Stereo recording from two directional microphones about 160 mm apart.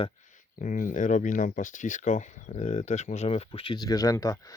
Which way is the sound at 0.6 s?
55° left (ahead or behind).